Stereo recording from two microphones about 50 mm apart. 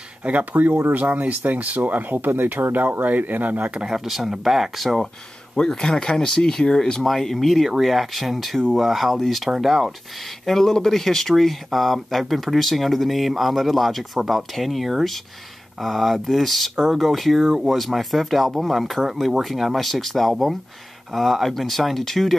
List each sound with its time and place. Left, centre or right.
0.2 s speech: right
3.7 s speech: centre
5.6 s speech: centre
10.4 s speech: centre